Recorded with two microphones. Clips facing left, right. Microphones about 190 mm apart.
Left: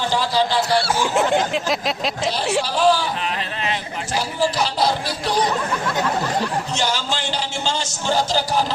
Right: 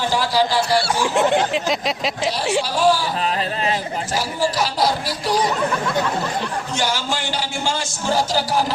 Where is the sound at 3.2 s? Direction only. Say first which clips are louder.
Right 4 dB; 35° right (ahead or behind).